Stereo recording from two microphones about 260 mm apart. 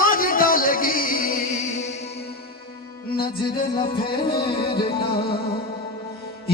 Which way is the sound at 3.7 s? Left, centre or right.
Centre.